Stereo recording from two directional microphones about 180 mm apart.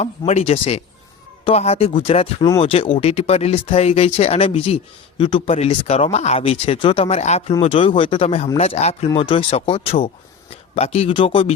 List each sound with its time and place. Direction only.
0.3 s speech: 35° left (ahead or behind)